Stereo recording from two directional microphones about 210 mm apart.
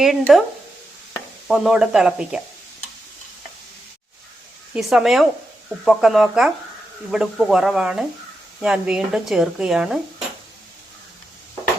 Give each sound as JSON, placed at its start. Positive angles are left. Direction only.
{"t": 0.0, "sound": "speech", "side_deg": 0}
{"t": 1.5, "sound": "speech", "side_deg": 0}
{"t": 4.7, "sound": "speech", "side_deg": 0}